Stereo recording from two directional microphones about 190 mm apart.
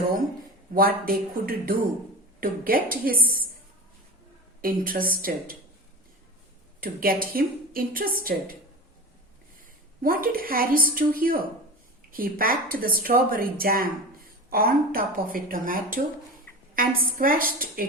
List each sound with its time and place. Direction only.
0.7 s a woman's voice: 50° right (ahead or behind)
4.6 s a woman's voice: 50° right (ahead or behind)
6.7 s a woman's voice: 50° right (ahead or behind)
10.0 s a woman's voice: 50° right (ahead or behind)